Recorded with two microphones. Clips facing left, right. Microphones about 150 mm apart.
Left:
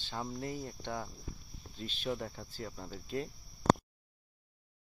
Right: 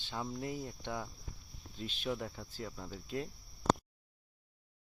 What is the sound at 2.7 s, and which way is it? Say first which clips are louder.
Speech: even; 10° left (ahead or behind).